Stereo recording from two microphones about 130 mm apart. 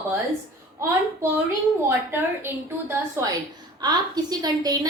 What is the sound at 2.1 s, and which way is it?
A woman's voice, 20° right (ahead or behind).